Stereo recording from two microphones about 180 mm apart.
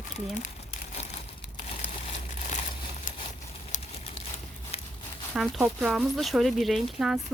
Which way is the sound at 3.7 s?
40° left (ahead or behind).